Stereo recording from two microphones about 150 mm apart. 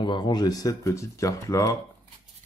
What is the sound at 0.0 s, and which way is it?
Speech, 30° left (ahead or behind).